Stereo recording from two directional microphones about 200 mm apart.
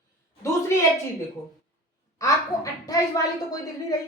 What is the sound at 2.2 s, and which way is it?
Speech, 15° left (ahead or behind).